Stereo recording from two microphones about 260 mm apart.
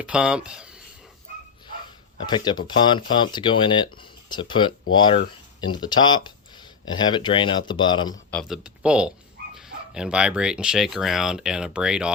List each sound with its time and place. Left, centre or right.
0.0 s speech: centre
2.1 s speech: centre
8.3 s speech: centre